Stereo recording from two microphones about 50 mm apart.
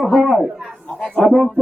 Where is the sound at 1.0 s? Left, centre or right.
Left.